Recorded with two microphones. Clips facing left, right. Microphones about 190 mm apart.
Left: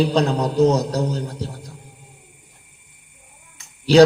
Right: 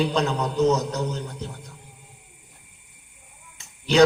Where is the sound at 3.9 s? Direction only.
35° left (ahead or behind).